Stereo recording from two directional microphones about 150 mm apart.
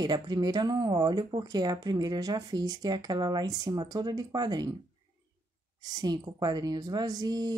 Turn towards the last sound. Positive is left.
turn(degrees=-25)  # may be behind; listen again after turning